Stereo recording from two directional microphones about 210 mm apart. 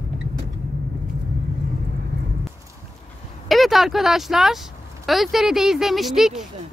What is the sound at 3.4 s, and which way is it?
Speech, centre (ahead or behind).